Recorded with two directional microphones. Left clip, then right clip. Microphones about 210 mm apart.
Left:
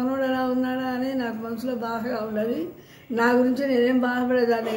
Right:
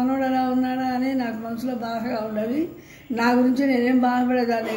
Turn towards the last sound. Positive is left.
turn(degrees=15)  # may be behind; listen again after turning